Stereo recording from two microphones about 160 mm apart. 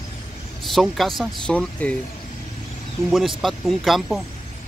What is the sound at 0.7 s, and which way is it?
Speech, centre (ahead or behind).